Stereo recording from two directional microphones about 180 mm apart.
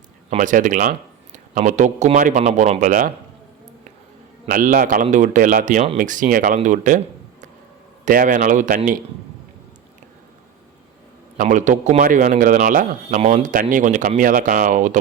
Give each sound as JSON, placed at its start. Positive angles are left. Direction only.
{"t": 0.3, "sound": "speech", "side_deg": -45}
{"t": 4.4, "sound": "a man's voice", "side_deg": -50}
{"t": 8.0, "sound": "a man's voice", "side_deg": -50}
{"t": 11.3, "sound": "a man's voice", "side_deg": -45}